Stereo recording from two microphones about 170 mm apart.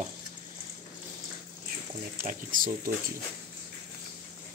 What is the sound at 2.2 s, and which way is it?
Speech, 55° right (ahead or behind).